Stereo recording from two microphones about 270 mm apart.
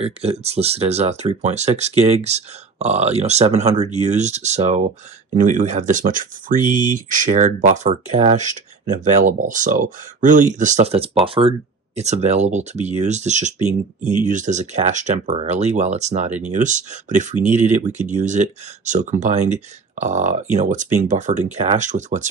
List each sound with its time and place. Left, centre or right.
0.0 s speech: right